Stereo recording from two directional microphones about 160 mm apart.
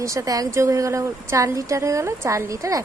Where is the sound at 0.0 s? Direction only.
20° right (ahead or behind).